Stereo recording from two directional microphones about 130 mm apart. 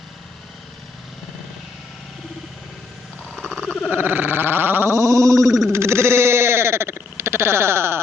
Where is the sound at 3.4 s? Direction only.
5° left (ahead or behind).